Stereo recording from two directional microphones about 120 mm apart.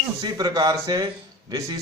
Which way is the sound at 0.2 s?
35° right (ahead or behind).